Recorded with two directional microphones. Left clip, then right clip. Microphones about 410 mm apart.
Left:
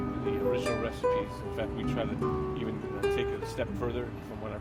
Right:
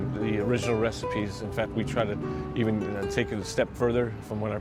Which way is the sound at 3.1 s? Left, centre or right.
Right.